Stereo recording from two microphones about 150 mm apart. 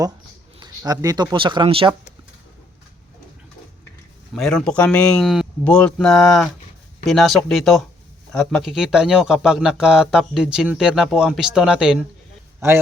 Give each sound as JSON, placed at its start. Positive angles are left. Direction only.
{"t": 0.6, "sound": "speech", "side_deg": -25}
{"t": 4.4, "sound": "speech", "side_deg": 5}
{"t": 12.5, "sound": "a man's voice", "side_deg": -15}